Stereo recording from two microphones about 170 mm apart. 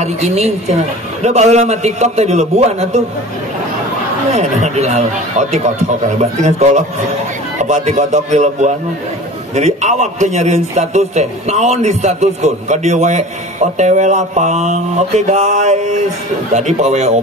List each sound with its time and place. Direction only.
0.0 s a man's voice: 40° right (ahead or behind)
4.3 s a man's voice: 45° right (ahead or behind)